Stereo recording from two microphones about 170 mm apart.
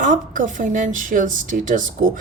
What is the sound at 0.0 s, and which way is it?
A woman's voice, 50° right (ahead or behind).